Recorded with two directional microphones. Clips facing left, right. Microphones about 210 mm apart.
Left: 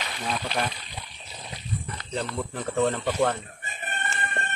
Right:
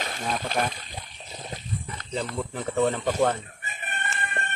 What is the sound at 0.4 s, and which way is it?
Speech, 50° right (ahead or behind).